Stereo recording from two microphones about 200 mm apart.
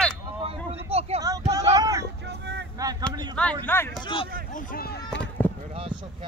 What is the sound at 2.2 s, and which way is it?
Vehicle, 55° right (ahead or behind).